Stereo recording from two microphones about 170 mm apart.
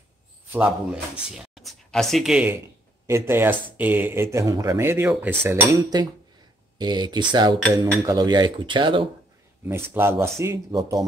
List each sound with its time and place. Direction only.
0.5 s speech: 10° right (ahead or behind)
1.3 s speech: centre (ahead or behind)
3.1 s speech: 15° right (ahead or behind)
9.7 s speech: 15° right (ahead or behind)